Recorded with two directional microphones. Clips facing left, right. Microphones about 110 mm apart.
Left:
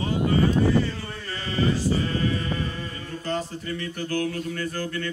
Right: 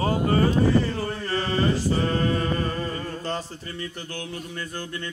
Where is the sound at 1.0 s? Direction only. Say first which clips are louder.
Right 7 dB; 45° right (ahead or behind).